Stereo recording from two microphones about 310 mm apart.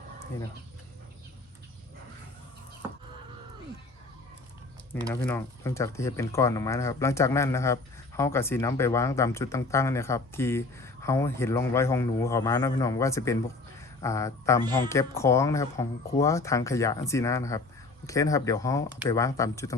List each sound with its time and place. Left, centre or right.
5.1 s speech: centre